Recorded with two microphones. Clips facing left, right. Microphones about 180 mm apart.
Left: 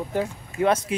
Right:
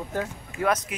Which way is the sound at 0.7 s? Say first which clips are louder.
Left 3 dB; 30° left (ahead or behind).